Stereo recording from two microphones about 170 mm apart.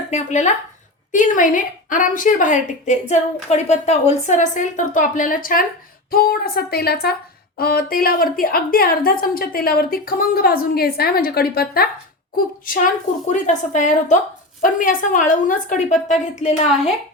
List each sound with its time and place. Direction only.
0.1 s a woman's voice: 40° left (ahead or behind); by 11.9 s 60° left (ahead or behind)
12.6 s a woman's voice: 50° left (ahead or behind)